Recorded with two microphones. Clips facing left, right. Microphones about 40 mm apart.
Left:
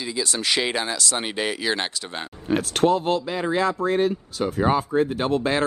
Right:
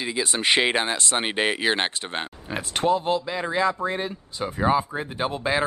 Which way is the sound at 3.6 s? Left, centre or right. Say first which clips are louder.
Left 4 dB; centre.